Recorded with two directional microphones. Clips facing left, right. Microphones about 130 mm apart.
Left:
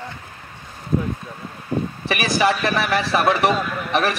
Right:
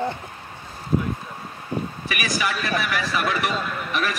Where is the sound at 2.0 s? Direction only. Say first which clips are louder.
Left 9 dB; 30° left (ahead or behind).